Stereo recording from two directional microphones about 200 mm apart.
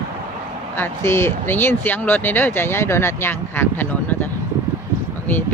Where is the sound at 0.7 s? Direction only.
10° left (ahead or behind).